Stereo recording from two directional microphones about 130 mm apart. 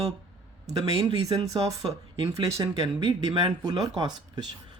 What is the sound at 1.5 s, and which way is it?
Speech, 30° right (ahead or behind).